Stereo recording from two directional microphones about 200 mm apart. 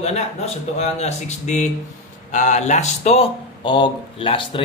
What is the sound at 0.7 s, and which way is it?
A man's voice, 35° left (ahead or behind).